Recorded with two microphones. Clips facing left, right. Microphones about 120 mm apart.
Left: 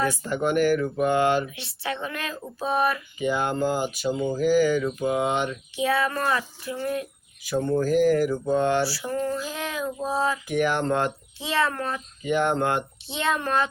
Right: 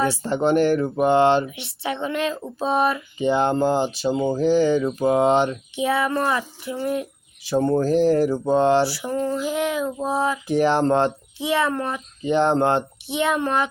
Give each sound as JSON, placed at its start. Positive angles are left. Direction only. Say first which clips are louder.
{"t": 0.0, "sound": "speech", "louder": "right 4 dB", "side_deg": -30}
{"t": 5.7, "sound": "speech", "louder": "right 2 dB", "side_deg": -20}
{"t": 7.5, "sound": "speech", "louder": "right 3 dB", "side_deg": -40}
{"t": 10.4, "sound": "speech", "louder": "right 5 dB", "side_deg": -30}
{"t": 11.3, "sound": "speech", "louder": "right 3 dB", "side_deg": -15}
{"t": 12.2, "sound": "speech", "louder": "right 5 dB", "side_deg": -30}
{"t": 13.1, "sound": "speech", "louder": "right 4 dB", "side_deg": -15}